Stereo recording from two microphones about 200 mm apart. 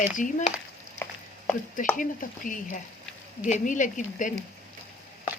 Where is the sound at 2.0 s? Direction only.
40° left (ahead or behind).